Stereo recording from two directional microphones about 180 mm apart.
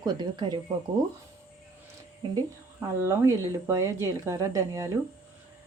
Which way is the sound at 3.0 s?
15° right (ahead or behind).